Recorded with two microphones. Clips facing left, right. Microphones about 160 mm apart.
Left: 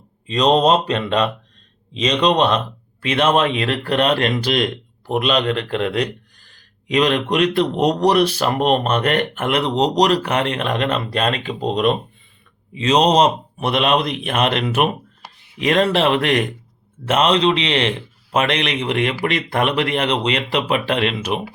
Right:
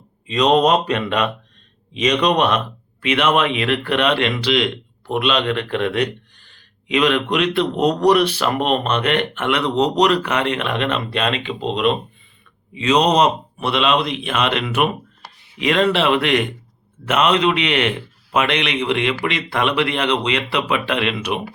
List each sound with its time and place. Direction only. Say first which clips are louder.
0.3 s a man's voice: even; 35° left (ahead or behind)